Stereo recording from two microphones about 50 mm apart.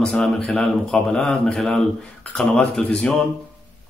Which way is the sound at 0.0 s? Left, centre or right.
Centre.